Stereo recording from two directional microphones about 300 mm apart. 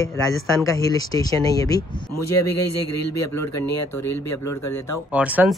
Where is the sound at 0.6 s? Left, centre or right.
Centre.